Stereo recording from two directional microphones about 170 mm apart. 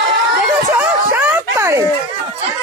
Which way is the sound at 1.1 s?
10° right (ahead or behind).